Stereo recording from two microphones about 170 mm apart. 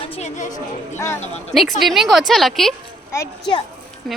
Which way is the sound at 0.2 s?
45° left (ahead or behind).